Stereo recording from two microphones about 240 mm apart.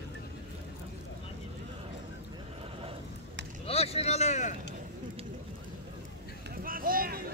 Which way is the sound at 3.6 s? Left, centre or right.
Left.